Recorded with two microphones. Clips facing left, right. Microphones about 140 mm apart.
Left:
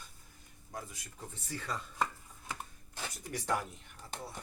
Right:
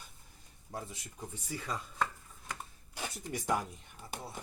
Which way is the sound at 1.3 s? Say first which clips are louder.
Right 1 dB; 10° right (ahead or behind).